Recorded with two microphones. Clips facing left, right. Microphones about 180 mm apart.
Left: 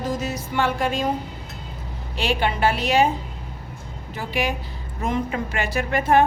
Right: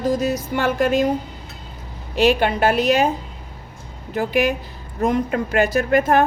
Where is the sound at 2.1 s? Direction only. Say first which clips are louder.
Right 7 dB; 45° right (ahead or behind).